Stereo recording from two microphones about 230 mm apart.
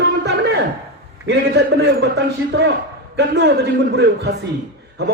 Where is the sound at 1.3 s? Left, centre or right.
Right.